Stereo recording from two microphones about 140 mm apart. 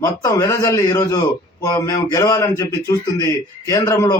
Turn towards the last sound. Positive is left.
turn(degrees=25)  # may be behind; listen again after turning